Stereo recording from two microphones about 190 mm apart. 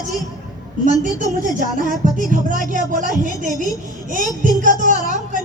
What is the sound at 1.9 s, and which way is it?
Speech, 45° right (ahead or behind).